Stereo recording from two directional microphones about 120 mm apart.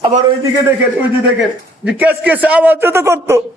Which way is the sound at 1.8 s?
15° right (ahead or behind).